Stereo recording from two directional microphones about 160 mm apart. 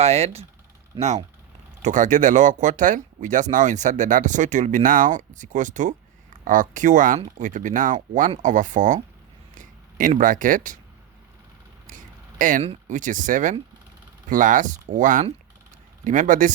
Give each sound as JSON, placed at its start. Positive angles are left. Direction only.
{"t": 0.0, "sound": "speech", "side_deg": -40}
{"t": 11.9, "sound": "a sound", "side_deg": -55}
{"t": 12.6, "sound": "speech", "side_deg": -55}